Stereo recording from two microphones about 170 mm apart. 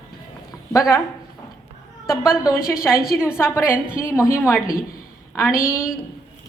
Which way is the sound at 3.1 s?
5° right (ahead or behind).